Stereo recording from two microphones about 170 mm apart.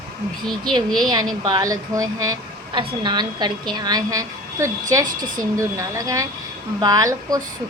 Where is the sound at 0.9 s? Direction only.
25° right (ahead or behind).